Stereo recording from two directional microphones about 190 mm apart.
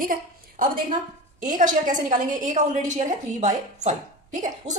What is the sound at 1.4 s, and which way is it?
A woman's voice, 40° right (ahead or behind).